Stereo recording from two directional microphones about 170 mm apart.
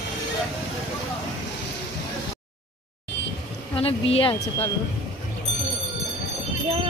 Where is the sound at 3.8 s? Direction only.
35° left (ahead or behind).